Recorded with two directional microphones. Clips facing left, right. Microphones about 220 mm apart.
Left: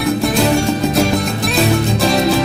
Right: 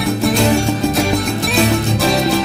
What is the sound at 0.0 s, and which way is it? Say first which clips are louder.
Music: even; centre (ahead or behind).